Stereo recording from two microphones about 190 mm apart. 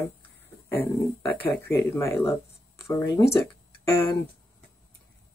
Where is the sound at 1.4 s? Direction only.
10° left (ahead or behind).